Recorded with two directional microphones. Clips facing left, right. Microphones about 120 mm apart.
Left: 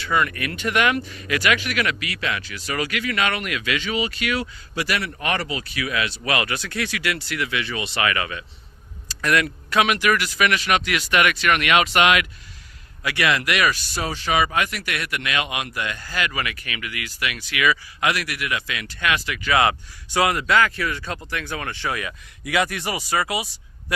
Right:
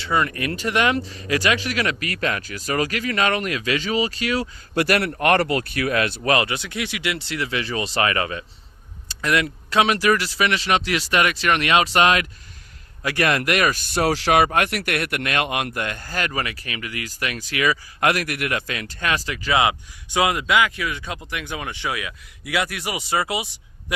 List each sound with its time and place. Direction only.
0.0 s speech: 30° right (ahead or behind)
4.7 s a man's voice: 55° right (ahead or behind)
6.3 s speech: 25° right (ahead or behind); by 14.4 s 85° right
14.4 s speech: 55° right (ahead or behind); by 19.5 s 30° right (ahead or behind)
19.5 s speech: 20° right (ahead or behind)
23.0 s speech: 25° right (ahead or behind)